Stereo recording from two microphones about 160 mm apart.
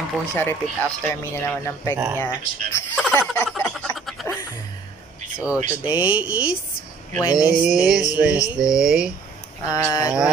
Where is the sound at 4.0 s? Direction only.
Centre (ahead or behind).